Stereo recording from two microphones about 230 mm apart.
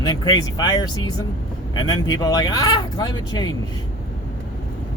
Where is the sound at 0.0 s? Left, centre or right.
Centre.